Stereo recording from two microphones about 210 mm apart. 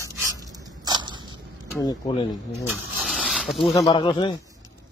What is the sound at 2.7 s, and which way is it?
Snake, centre (ahead or behind).